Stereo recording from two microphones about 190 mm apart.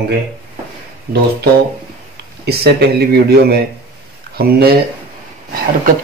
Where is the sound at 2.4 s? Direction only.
55° right (ahead or behind).